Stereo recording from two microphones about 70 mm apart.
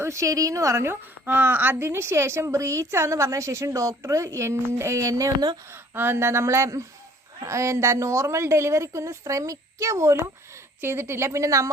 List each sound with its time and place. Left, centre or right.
0.0 s a woman's voice: right
1.2 s a woman's voice: right
1.7 s a woman's voice: right
5.7 s a woman's voice: right